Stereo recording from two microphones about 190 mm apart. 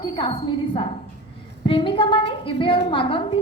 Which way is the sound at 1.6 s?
25° left (ahead or behind).